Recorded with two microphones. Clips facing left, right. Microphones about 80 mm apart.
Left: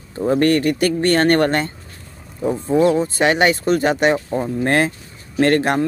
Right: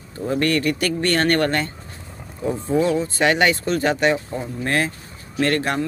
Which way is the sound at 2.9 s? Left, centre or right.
Left.